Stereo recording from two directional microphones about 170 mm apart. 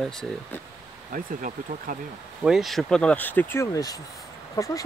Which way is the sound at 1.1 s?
55° right (ahead or behind).